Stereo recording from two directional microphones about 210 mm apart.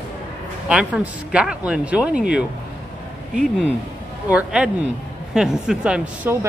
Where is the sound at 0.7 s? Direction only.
5° right (ahead or behind).